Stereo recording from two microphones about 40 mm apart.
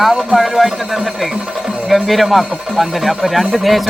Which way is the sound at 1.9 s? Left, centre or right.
Centre.